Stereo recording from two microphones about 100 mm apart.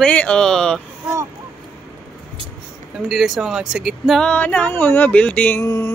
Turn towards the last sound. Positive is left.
turn(degrees=30)  # may be behind; listen again after turning